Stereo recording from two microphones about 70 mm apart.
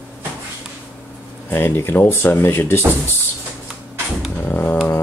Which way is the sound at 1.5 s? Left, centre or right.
Left.